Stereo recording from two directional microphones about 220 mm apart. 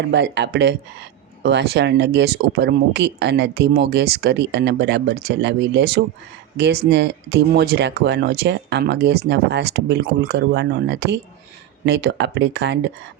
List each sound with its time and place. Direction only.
0.1 s speech: 50° right (ahead or behind)